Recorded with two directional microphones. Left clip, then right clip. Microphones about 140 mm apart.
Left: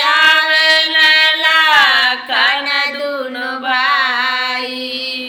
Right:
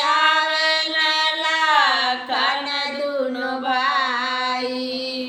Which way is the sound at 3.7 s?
25° right (ahead or behind).